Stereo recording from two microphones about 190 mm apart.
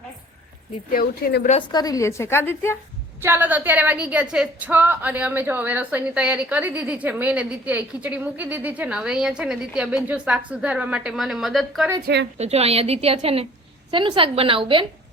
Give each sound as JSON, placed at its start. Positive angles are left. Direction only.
{"t": 0.9, "sound": "speech", "side_deg": 55}
{"t": 1.7, "sound": "a woman's voice", "side_deg": 20}
{"t": 3.2, "sound": "a woman's voice", "side_deg": -10}
{"t": 12.0, "sound": "a woman's voice", "side_deg": -65}
{"t": 12.4, "sound": "a woman's voice", "side_deg": -35}